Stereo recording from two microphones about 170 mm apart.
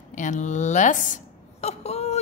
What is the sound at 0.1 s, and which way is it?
A woman's voice, 45° left (ahead or behind).